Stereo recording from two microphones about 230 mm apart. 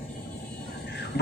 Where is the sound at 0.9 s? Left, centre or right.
Left.